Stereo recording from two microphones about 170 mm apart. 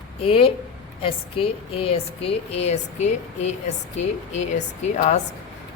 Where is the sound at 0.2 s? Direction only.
35° left (ahead or behind).